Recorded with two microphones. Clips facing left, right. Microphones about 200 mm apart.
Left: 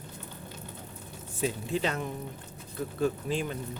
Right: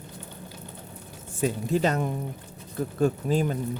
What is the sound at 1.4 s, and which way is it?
Speech, 45° right (ahead or behind).